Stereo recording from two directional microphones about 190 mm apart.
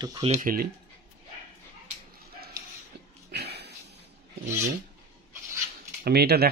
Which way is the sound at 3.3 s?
60° right (ahead or behind).